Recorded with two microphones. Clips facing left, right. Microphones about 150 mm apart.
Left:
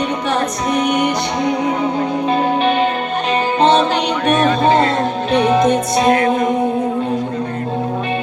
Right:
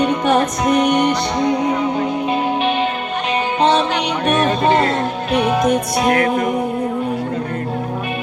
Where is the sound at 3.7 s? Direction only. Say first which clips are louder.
Left 3 dB; 30° left (ahead or behind).